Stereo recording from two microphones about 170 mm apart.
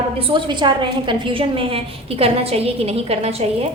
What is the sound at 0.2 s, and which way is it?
A woman's voice, 30° right (ahead or behind).